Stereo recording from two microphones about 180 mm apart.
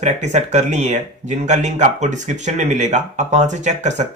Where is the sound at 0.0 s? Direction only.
40° right (ahead or behind).